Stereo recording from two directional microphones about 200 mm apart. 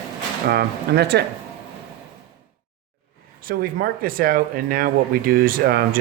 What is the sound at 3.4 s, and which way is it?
Speech, 45° right (ahead or behind).